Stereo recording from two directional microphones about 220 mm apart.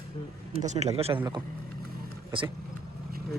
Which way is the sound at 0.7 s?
30° right (ahead or behind).